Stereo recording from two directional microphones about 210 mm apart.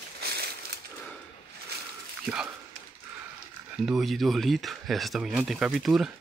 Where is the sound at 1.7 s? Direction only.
50° right (ahead or behind).